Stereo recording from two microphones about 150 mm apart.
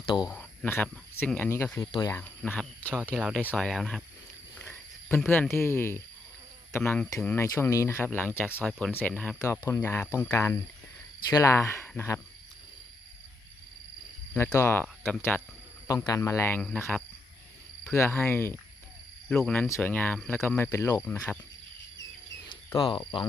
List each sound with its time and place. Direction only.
0.3 s speech: 10° left (ahead or behind)
3.2 s speech: 5° right (ahead or behind)
3.4 s speech: 10° left (ahead or behind)
5.1 s speech: 10° left (ahead or behind)
9.4 s speech: 20° left (ahead or behind)
14.3 s speech: 15° left (ahead or behind)
16.0 s speech: 20° left (ahead or behind)
16.6 s speech: 5° left (ahead or behind)
17.8 s speech: 15° left (ahead or behind)
22.4 s speech: 30° left (ahead or behind)